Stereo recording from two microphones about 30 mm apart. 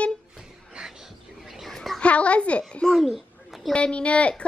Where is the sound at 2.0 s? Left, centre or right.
Left.